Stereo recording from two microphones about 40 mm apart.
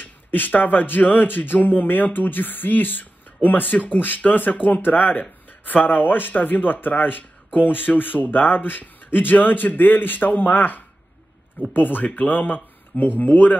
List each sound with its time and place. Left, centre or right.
0.0 s speech: left